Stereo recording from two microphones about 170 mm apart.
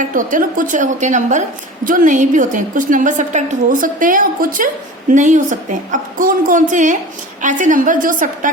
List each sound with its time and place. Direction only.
0.0 s a woman's voice: 50° right (ahead or behind)